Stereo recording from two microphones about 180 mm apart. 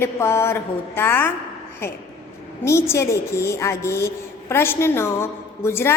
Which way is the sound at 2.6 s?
15° left (ahead or behind).